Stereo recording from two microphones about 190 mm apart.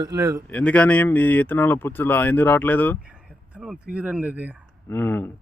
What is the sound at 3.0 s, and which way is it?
Speech, 5° right (ahead or behind).